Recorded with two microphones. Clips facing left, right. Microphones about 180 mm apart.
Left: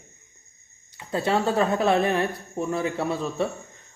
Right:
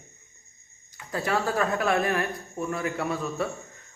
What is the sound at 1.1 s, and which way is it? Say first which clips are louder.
Speech: left 4 dB; 25° left (ahead or behind).